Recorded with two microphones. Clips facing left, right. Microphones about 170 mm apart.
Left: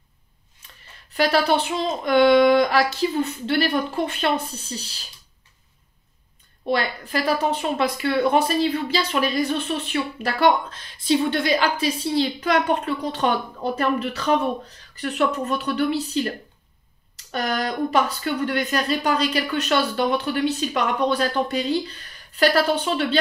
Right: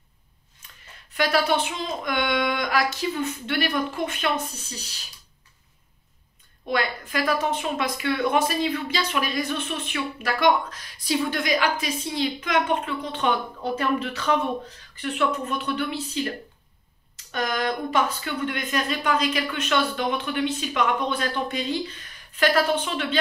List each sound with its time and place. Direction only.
1.1 s speech: 35° left (ahead or behind)
6.7 s speech: 30° left (ahead or behind)
15.0 s speech: 40° left (ahead or behind)
17.3 s speech: 35° left (ahead or behind)